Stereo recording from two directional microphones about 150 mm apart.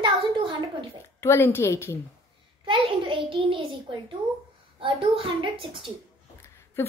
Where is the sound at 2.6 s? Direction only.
35° right (ahead or behind).